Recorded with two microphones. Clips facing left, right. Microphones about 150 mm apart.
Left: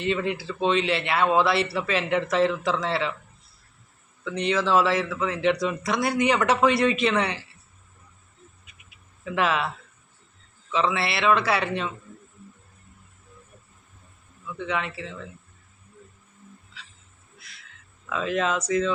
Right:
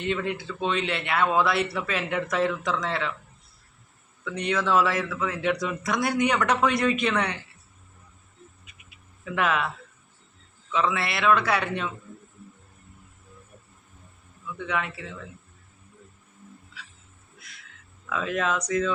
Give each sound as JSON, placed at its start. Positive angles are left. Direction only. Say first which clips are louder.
{"t": 0.0, "sound": "speech", "louder": "left 2 dB", "side_deg": 0}
{"t": 4.3, "sound": "speech", "louder": "left 2 dB", "side_deg": 0}
{"t": 9.3, "sound": "speech", "louder": "left 1 dB", "side_deg": 0}
{"t": 10.7, "sound": "speech", "louder": "left 1 dB", "side_deg": 0}
{"t": 14.7, "sound": "speech", "louder": "left 1 dB", "side_deg": 0}
{"t": 18.1, "sound": "speech", "louder": "left 2 dB", "side_deg": 0}